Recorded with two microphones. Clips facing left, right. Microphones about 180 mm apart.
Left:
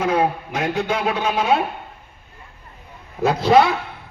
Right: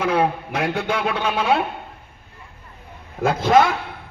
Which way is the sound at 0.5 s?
60° right (ahead or behind).